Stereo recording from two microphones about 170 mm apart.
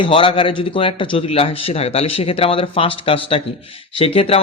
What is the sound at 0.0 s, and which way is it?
A man's voice, 30° left (ahead or behind).